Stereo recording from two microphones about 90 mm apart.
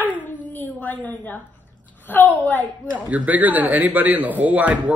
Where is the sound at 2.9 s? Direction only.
15° right (ahead or behind).